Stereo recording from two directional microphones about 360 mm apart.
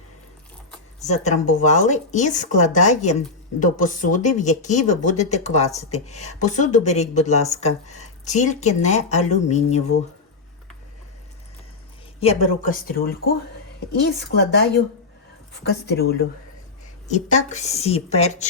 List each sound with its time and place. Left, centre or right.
1.0 s speech: centre
12.2 s speech: centre
15.9 s speech: left